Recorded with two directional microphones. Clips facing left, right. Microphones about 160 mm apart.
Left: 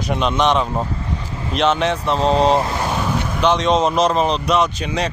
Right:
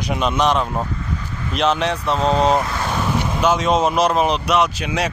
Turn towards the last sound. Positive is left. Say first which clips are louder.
# even
turn(degrees=-5)  # may be behind; listen again after turning